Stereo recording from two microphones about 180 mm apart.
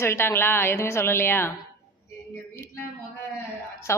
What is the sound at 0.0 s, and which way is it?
A woman's voice, 15° left (ahead or behind).